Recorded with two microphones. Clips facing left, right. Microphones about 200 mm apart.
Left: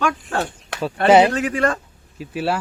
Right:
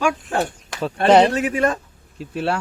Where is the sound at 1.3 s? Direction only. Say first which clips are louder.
Right 1 dB; 20° right (ahead or behind).